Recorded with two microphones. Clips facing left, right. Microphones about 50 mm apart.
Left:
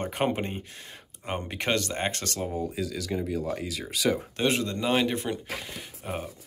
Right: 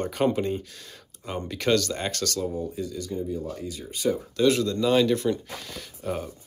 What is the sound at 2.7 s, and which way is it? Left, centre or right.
Speech, left.